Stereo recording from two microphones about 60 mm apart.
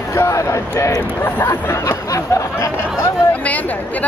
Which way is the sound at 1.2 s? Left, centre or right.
Left.